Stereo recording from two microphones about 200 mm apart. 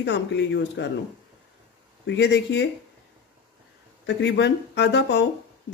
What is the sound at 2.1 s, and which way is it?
Speech, 60° left (ahead or behind).